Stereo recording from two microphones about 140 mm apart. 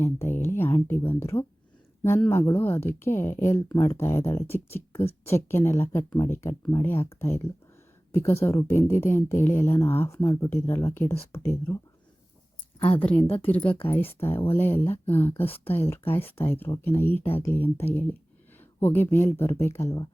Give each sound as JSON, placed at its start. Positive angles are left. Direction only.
{"t": 0.0, "sound": "a sound", "side_deg": 15}
{"t": 0.9, "sound": "speech", "side_deg": 15}
{"t": 2.6, "sound": "speech", "side_deg": 15}
{"t": 13.0, "sound": "speech", "side_deg": 10}